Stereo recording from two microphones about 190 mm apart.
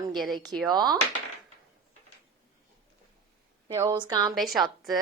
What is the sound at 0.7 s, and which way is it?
Speech, 20° right (ahead or behind).